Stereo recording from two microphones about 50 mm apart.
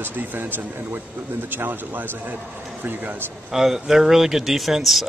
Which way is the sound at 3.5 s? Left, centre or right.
Centre.